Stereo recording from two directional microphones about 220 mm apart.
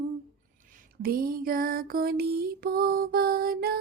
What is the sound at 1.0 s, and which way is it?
Music, 40° right (ahead or behind).